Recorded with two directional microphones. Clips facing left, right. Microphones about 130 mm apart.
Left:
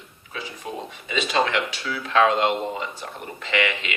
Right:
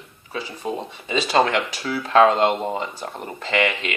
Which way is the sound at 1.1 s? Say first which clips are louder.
Right 4 dB; 35° right (ahead or behind).